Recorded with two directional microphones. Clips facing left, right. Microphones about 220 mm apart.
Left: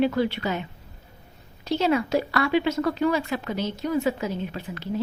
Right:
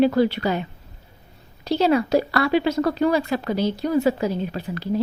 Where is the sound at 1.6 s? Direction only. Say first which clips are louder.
Right 4 dB; 35° right (ahead or behind).